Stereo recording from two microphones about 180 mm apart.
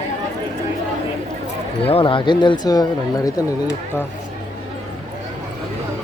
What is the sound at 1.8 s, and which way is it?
Speech, 30° left (ahead or behind).